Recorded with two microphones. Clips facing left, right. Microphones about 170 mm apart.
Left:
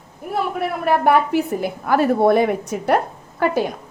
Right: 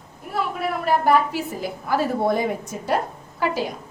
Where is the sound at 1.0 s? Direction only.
55° left (ahead or behind).